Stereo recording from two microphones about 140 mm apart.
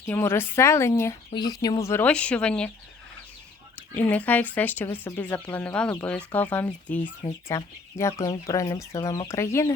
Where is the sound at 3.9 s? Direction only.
10° left (ahead or behind).